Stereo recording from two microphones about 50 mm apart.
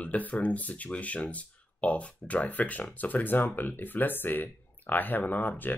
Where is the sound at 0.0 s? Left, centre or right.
Left.